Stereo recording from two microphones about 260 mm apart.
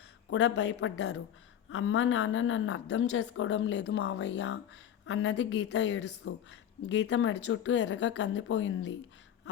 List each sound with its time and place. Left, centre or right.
0.3 s a woman's voice: left